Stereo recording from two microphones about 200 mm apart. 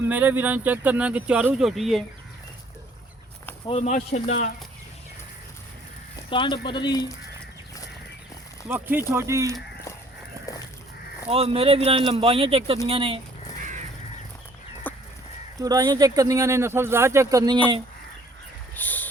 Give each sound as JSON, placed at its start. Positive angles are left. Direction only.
{"t": 0.0, "sound": "speech", "side_deg": -10}
{"t": 3.7, "sound": "speech", "side_deg": 35}
{"t": 6.1, "sound": "speech", "side_deg": 25}
{"t": 8.6, "sound": "speech", "side_deg": -10}
{"t": 11.3, "sound": "speech", "side_deg": -30}
{"t": 14.8, "sound": "fowl", "side_deg": 10}
{"t": 15.5, "sound": "speech", "side_deg": -20}
{"t": 18.7, "sound": "a sound", "side_deg": 10}